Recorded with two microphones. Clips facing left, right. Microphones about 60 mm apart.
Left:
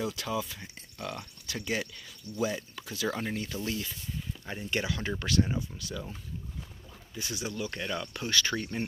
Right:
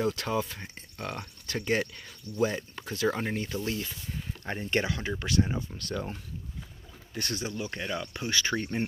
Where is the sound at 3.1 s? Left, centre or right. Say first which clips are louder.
Right 1 dB; right.